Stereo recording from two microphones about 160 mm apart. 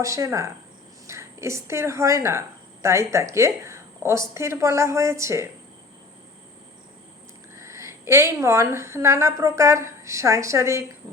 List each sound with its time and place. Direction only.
0.0 s a woman's voice: 20° right (ahead or behind)
7.6 s a woman's voice: 15° right (ahead or behind)